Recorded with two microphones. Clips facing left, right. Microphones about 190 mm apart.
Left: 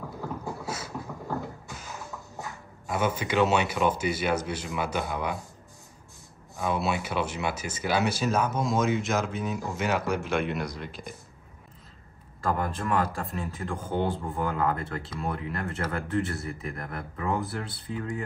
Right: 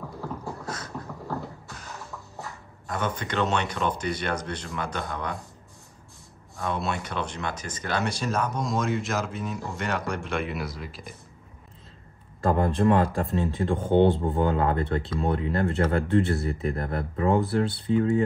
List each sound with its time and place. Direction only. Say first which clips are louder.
0.7 s beatboxing: even; 5° left (ahead or behind)
2.9 s speech: left 2 dB; 5° left (ahead or behind)
6.5 s speech: left 1 dB; 5° left (ahead or behind)
12.4 s speech: right 7 dB; 30° right (ahead or behind)